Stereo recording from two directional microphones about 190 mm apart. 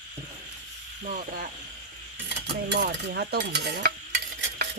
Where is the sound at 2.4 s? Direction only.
65° right (ahead or behind).